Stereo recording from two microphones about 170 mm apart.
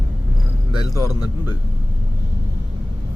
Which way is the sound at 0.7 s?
20° left (ahead or behind).